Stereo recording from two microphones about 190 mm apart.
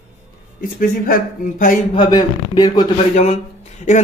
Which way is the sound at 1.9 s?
20° left (ahead or behind).